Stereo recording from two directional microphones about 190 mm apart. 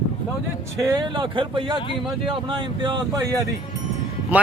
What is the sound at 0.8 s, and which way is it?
Speech, 20° right (ahead or behind).